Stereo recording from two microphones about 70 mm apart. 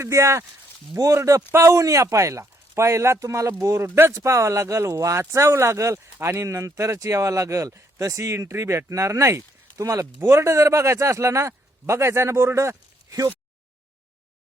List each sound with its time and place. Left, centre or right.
0.0 s speech: right
3.8 s speech: right
4.1 s speech: right